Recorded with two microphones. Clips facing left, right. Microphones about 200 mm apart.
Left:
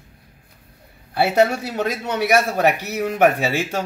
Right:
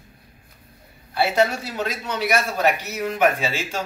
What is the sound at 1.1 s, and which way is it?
A man's voice, 60° left (ahead or behind).